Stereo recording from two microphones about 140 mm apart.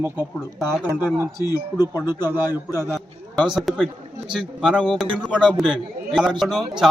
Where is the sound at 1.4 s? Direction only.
25° left (ahead or behind).